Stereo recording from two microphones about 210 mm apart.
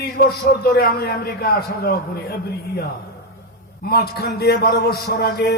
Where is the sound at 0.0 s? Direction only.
50° left (ahead or behind).